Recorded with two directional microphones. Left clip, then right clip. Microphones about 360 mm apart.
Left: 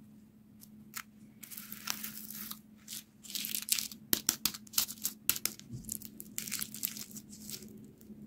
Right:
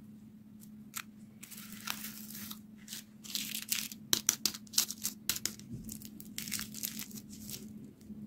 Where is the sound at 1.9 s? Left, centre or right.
Centre.